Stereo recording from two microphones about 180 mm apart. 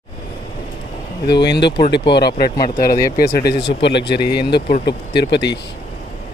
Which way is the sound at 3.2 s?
60° left (ahead or behind).